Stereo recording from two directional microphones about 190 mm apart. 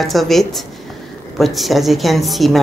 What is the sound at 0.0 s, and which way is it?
A woman's voice, centre (ahead or behind).